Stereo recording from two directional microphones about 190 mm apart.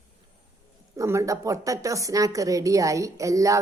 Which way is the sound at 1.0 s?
15° right (ahead or behind).